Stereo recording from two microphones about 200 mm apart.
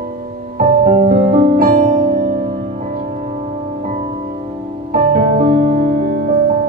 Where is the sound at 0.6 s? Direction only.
40° right (ahead or behind).